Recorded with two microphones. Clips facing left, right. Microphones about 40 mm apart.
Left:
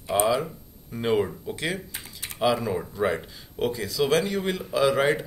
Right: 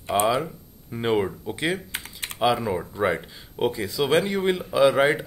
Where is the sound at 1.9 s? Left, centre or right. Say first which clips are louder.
Right 5 dB; right.